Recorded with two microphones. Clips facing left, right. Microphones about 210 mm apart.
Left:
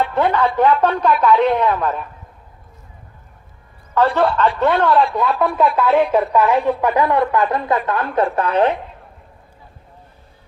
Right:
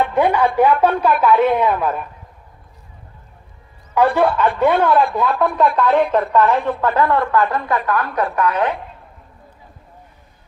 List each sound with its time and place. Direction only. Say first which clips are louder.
0.1 s a man's voice: right 1 dB; 10° right (ahead or behind)
4.0 s a man's voice: right 1 dB; 10° right (ahead or behind); by 8.7 s 30° left (ahead or behind)